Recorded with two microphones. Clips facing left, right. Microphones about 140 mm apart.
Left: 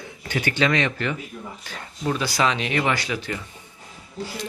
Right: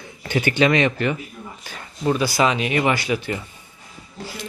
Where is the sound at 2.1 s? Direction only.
10° right (ahead or behind).